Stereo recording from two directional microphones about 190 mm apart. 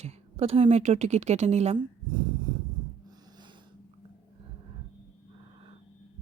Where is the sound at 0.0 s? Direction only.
35° right (ahead or behind).